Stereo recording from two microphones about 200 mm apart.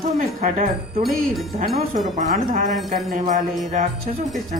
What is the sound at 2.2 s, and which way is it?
Speech, 40° right (ahead or behind).